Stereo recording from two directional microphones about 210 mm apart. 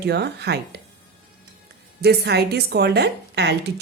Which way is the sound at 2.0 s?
50° right (ahead or behind).